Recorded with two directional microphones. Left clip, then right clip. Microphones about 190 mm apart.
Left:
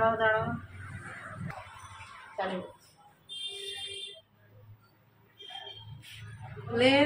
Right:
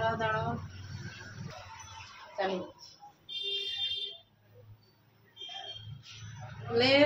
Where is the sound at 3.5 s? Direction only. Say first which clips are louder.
Right 5 dB; centre (ahead or behind).